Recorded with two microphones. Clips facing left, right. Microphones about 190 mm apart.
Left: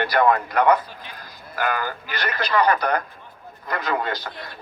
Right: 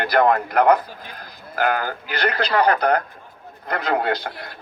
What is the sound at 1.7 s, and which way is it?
Speech, 60° right (ahead or behind).